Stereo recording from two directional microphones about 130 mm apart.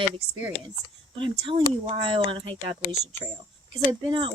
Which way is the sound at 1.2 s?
40° right (ahead or behind).